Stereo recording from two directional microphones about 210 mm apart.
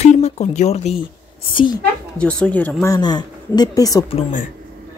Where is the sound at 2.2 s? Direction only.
5° left (ahead or behind).